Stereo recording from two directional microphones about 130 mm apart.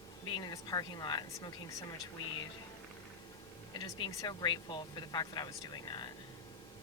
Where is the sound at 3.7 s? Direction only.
35° left (ahead or behind).